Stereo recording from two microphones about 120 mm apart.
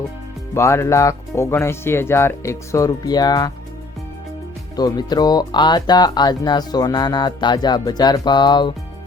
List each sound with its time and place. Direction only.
0.5 s speech: 25° left (ahead or behind)
4.8 s speech: 35° left (ahead or behind)